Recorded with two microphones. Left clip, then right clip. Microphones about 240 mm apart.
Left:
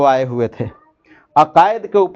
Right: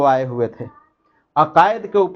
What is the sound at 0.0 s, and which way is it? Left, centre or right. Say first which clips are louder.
Speech: left 2 dB; left.